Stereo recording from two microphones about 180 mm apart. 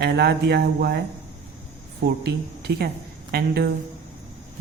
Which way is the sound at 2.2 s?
65° right (ahead or behind).